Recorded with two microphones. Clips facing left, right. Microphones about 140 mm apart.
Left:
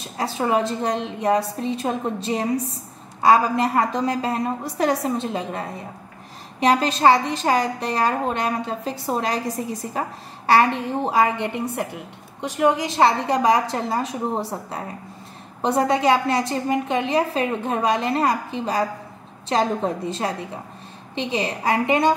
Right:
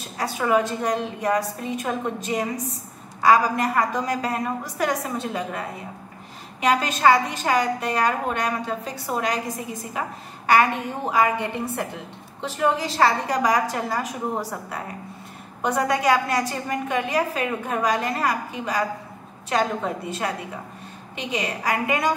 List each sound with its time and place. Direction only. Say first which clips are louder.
0.2 s a woman's voice: even; 30° left (ahead or behind)
6.6 s a woman's voice: left 2 dB; 30° left (ahead or behind)